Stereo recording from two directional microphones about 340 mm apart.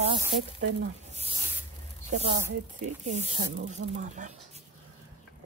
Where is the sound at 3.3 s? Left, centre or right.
Right.